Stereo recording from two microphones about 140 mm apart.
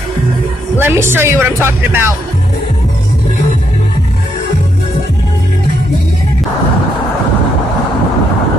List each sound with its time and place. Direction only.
0.7 s speech: 15° right (ahead or behind)